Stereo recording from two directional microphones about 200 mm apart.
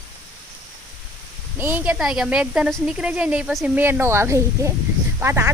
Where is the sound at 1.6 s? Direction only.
10° right (ahead or behind).